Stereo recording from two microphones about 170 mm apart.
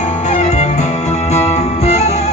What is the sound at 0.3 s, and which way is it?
Music, 40° left (ahead or behind).